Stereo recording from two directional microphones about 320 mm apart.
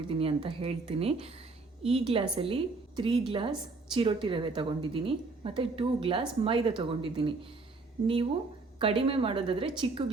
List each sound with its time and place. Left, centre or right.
0.1 s a woman's voice: centre